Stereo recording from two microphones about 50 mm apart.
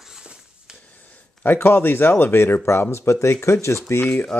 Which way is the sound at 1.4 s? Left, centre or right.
Left.